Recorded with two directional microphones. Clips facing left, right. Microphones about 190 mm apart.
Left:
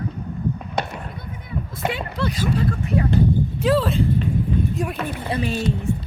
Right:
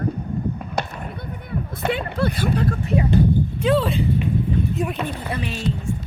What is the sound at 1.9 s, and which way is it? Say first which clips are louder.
Speech: right 3 dB; 55° right (ahead or behind).